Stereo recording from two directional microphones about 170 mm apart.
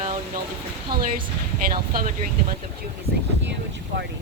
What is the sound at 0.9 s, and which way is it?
Speech, 65° right (ahead or behind).